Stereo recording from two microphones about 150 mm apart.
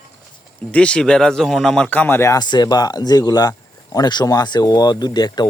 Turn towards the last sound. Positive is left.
turn(degrees=30)  # may be behind; listen again after turning